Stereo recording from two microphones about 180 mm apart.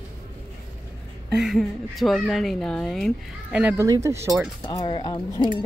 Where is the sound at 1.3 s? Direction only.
Centre (ahead or behind).